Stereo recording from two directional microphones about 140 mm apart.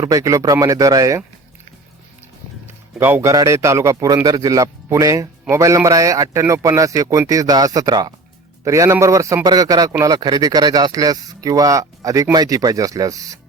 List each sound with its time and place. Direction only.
0.0 s a man's voice: 25° right (ahead or behind)
2.6 s a man's voice: 15° right (ahead or behind)